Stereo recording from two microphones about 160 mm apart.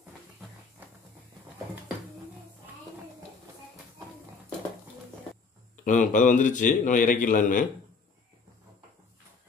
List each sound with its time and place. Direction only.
5.9 s a man's voice: 55° left (ahead or behind)